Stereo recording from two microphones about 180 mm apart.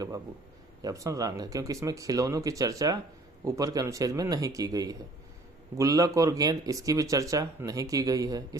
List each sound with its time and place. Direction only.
0.8 s speech: 20° right (ahead or behind)